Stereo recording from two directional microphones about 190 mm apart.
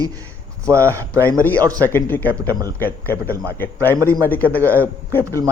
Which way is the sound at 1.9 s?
10° left (ahead or behind).